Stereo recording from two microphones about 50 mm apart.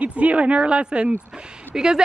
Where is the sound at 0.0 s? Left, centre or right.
Right.